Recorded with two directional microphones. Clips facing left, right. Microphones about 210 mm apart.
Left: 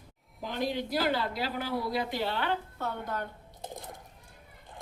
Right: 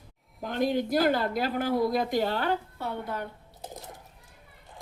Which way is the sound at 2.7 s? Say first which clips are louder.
Right 1 dB; 10° right (ahead or behind).